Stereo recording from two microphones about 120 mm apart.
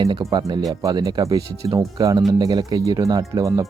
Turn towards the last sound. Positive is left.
turn(degrees=-30)  # may be behind; listen again after turning